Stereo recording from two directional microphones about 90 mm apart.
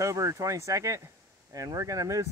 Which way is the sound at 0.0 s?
35° right (ahead or behind).